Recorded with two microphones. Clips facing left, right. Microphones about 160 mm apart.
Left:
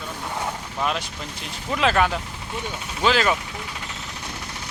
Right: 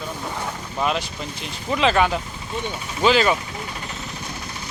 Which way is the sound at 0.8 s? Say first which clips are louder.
Right 3 dB; 5° right (ahead or behind).